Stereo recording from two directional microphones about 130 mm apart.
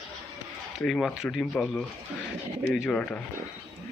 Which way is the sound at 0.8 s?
5° left (ahead or behind).